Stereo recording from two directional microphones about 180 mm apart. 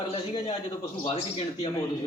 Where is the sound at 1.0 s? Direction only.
35° left (ahead or behind).